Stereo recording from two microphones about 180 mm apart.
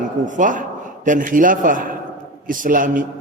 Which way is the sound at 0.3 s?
45° right (ahead or behind).